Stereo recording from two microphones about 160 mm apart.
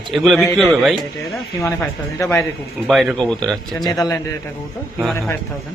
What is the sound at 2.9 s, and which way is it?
Speech, centre (ahead or behind).